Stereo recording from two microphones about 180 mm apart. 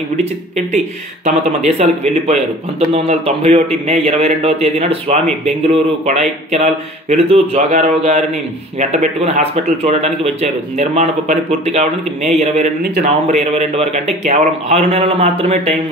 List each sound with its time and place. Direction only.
1.8 s a man's voice: 35° right (ahead or behind)